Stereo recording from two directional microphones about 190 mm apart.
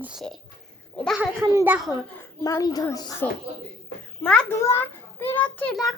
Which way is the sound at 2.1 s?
15° left (ahead or behind).